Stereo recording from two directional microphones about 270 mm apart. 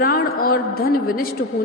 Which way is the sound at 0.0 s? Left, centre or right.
Left.